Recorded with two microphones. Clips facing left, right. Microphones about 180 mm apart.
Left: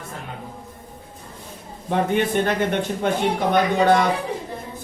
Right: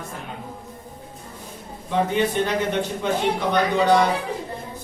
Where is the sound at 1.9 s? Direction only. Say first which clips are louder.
Left 1 dB; 55° left (ahead or behind).